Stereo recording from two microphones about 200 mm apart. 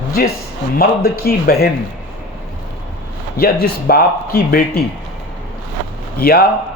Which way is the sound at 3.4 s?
50° left (ahead or behind).